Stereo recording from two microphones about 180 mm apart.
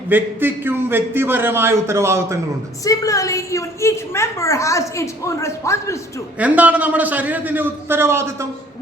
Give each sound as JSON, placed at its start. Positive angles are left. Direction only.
{"t": 0.1, "sound": "a man's voice", "side_deg": -10}
{"t": 2.8, "sound": "a woman's voice", "side_deg": 20}
{"t": 6.4, "sound": "a man's voice", "side_deg": -10}